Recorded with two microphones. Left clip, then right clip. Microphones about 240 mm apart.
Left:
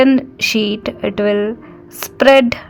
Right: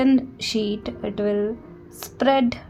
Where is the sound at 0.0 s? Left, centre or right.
Left.